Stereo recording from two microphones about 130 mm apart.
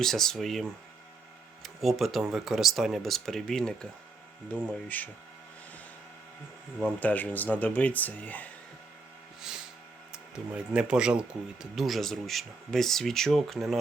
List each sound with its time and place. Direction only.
0.0 s speech: 5° left (ahead or behind)
4.9 s speech: 10° left (ahead or behind)
7.0 s speech: 10° left (ahead or behind)
10.1 s speech: 5° right (ahead or behind)